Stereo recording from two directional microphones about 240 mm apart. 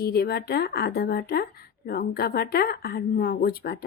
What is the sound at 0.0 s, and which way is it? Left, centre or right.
A woman's voice, left.